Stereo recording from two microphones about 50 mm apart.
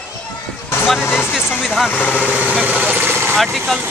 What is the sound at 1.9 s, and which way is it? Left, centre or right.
Speech, left.